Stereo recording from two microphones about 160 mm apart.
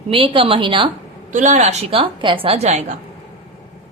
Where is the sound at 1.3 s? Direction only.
50° right (ahead or behind).